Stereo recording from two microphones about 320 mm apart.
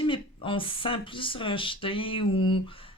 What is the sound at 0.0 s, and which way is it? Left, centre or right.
Speech, centre.